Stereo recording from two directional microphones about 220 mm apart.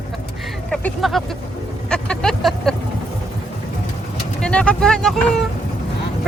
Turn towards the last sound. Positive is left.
turn(degrees=0)  # may be behind; listen again after turning